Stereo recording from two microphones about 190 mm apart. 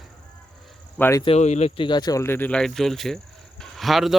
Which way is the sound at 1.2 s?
35° left (ahead or behind).